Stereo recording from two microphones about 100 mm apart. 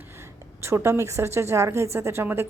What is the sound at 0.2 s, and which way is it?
A woman's voice, 25° right (ahead or behind).